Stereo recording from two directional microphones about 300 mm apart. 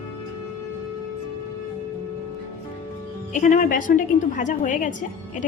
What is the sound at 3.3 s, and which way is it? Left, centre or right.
A woman's voice, left.